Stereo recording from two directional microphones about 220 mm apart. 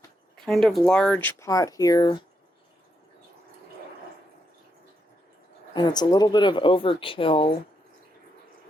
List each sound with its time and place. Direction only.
0.3 s speech: centre (ahead or behind); by 2.2 s 20° left (ahead or behind)
5.7 s speech: 20° left (ahead or behind)